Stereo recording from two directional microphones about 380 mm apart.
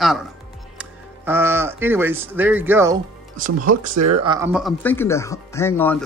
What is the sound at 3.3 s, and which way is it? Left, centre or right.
Speech, centre.